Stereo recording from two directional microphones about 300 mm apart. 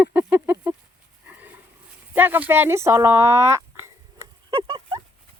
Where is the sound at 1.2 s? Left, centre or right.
Centre.